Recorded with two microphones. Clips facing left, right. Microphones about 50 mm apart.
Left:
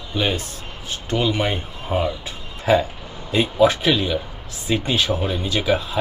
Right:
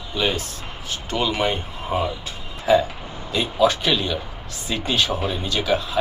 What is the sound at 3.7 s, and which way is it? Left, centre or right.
Speech, centre.